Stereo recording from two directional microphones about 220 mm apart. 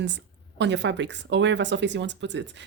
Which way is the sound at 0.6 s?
55° right (ahead or behind).